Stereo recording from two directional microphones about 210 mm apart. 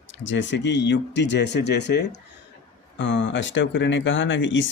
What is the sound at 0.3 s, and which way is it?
Speech, 60° left (ahead or behind).